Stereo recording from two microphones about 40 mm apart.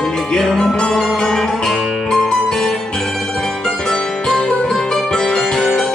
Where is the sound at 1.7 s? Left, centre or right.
Centre.